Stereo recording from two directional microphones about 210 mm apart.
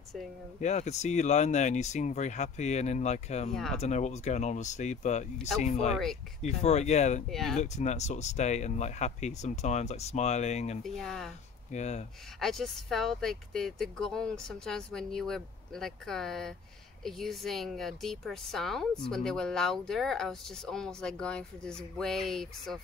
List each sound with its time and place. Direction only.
0.6 s speech: 35° left (ahead or behind)
7.2 s speech: centre (ahead or behind)
7.6 s speech: 35° left (ahead or behind)
10.8 s speech: centre (ahead or behind)
11.7 s speech: 35° left (ahead or behind)
12.4 s speech: centre (ahead or behind)